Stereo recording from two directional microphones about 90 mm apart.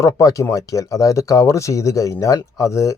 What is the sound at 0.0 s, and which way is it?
Speech, 40° left (ahead or behind).